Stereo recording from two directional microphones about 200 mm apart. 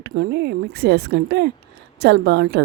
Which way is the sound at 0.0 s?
55° right (ahead or behind).